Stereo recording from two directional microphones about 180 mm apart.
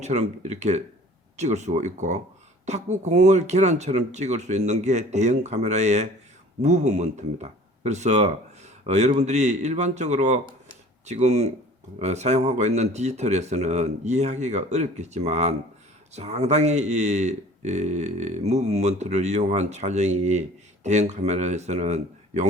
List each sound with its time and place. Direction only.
0.0 s speech: 40° right (ahead or behind)